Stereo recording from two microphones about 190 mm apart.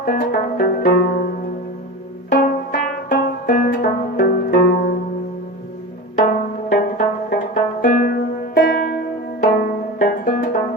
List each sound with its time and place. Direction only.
0.0 s music: 50° left (ahead or behind)
6.1 s pizzicato: 50° left (ahead or behind)
9.4 s music: 45° left (ahead or behind)